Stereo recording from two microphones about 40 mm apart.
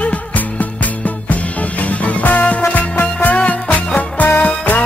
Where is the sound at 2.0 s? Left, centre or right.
Left.